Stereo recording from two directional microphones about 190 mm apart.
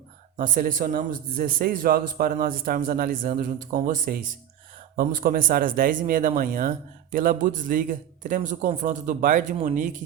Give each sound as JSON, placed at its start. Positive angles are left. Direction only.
{"t": 0.3, "sound": "speech", "side_deg": -45}